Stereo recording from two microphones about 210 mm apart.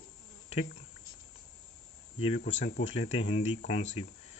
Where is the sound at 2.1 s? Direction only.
25° left (ahead or behind).